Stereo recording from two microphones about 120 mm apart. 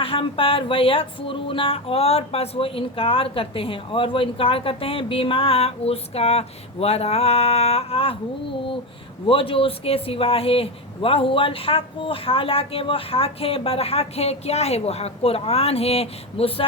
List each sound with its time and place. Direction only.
0.0 s speech: 50° left (ahead or behind)
9.2 s speech: 50° left (ahead or behind)